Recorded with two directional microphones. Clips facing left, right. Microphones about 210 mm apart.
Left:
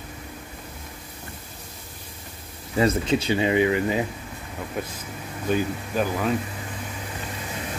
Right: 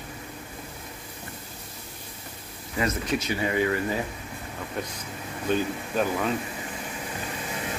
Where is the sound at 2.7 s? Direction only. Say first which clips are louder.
Left 6 dB; 30° left (ahead or behind).